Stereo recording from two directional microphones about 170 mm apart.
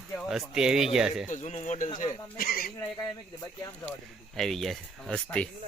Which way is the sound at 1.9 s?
55° left (ahead or behind).